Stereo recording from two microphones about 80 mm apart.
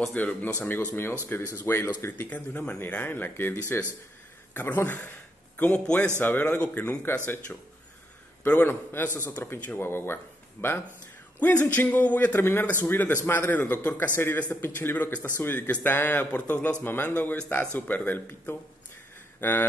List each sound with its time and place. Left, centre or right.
0.1 s speech: left
8.6 s speech: left